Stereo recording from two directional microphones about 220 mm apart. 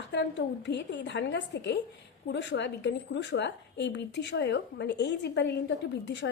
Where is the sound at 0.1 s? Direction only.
50° left (ahead or behind).